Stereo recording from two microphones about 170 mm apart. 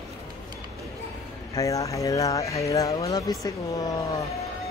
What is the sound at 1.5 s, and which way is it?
Speech, 20° left (ahead or behind).